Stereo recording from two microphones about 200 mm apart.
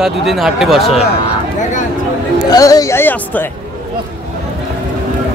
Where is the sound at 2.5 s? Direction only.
15° left (ahead or behind).